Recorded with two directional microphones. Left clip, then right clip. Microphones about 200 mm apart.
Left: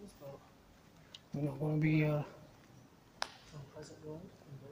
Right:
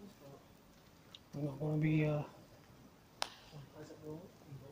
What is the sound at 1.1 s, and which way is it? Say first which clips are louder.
Speech: left 3 dB; 20° left (ahead or behind).